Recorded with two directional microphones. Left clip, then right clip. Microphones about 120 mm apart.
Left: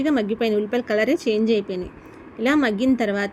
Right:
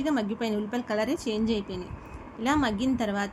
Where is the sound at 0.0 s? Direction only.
15° left (ahead or behind).